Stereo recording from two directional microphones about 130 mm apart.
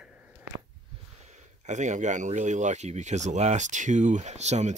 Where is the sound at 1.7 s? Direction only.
65° right (ahead or behind).